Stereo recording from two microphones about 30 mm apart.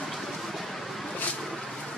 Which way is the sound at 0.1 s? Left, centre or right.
Centre.